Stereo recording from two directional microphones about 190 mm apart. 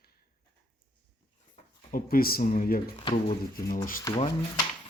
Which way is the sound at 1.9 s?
50° left (ahead or behind).